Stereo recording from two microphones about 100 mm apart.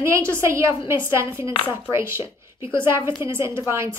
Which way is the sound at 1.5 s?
60° left (ahead or behind).